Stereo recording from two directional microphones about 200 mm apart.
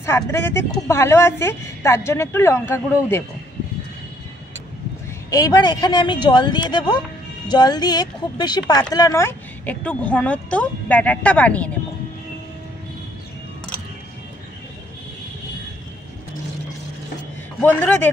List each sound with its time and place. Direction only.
0.0 s speech: 10° left (ahead or behind)
5.3 s speech: 20° left (ahead or behind)
17.6 s speech: 10° left (ahead or behind)